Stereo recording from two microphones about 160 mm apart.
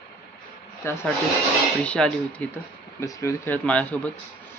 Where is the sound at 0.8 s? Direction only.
15° left (ahead or behind).